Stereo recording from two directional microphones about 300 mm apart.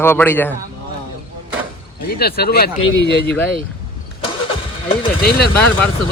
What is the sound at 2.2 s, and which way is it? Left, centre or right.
Speech, left.